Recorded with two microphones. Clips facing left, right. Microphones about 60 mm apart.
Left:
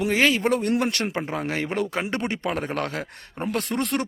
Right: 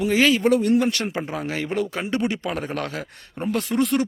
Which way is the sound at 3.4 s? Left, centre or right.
Left.